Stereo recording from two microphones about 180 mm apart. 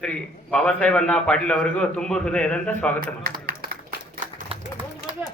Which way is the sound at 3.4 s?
55° right (ahead or behind).